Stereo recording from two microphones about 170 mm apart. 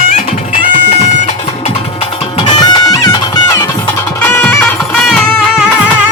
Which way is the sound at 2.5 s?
20° left (ahead or behind).